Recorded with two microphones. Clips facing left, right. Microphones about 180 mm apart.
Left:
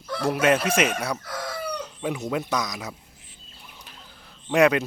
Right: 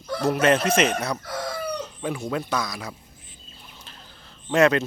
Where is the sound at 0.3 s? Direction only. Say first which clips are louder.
Right 1 dB; 10° left (ahead or behind).